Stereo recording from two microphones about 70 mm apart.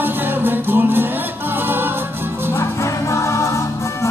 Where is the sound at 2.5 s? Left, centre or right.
Left.